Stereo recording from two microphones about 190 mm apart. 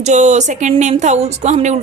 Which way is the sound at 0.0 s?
40° right (ahead or behind).